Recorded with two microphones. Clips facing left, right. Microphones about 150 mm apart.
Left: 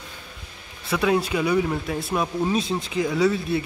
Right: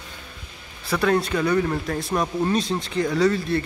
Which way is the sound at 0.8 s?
5° left (ahead or behind).